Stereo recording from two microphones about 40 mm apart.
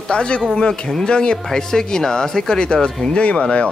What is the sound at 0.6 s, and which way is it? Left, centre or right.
Speech, centre.